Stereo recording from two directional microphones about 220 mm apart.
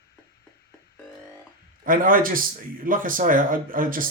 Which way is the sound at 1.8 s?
40° right (ahead or behind).